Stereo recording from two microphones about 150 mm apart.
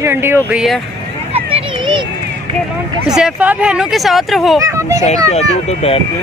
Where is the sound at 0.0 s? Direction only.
15° right (ahead or behind).